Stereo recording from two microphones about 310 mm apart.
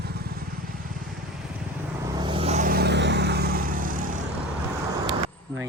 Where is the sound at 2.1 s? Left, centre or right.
Centre.